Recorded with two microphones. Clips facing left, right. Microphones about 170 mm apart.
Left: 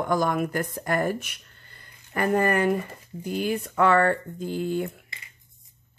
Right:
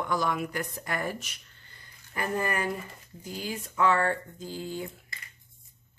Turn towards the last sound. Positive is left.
turn(degrees=60)  # may be behind; listen again after turning